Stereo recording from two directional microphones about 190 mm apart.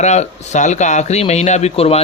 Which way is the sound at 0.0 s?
35° left (ahead or behind).